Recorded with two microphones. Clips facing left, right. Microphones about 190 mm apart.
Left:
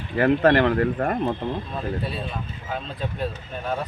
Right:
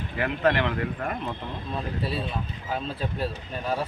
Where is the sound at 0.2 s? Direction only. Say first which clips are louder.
Left 7 dB; 45° left (ahead or behind).